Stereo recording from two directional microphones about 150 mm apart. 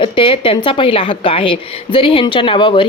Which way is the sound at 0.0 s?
35° left (ahead or behind).